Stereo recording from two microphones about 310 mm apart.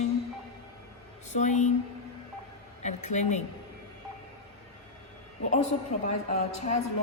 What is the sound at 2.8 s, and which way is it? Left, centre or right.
Speech, left.